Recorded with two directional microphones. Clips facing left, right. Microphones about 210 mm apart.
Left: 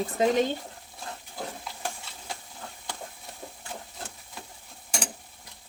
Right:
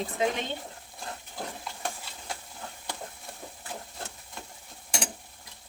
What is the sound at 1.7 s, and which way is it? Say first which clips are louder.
Stir: even; centre (ahead or behind).